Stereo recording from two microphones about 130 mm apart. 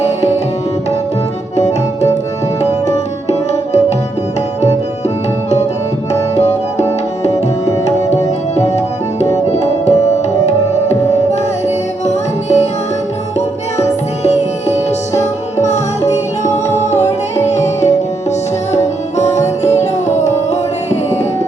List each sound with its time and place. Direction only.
3.2 s music: 60° left (ahead or behind)
8.1 s music: 60° left (ahead or behind)
9.5 s tabla: 60° left (ahead or behind)
12.0 s music: 60° left (ahead or behind)
14.3 s music: 60° left (ahead or behind)
16.4 s music: 20° left (ahead or behind)
16.7 s music: 60° left (ahead or behind)